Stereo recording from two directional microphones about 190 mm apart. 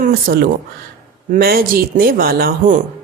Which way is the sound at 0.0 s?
50° right (ahead or behind).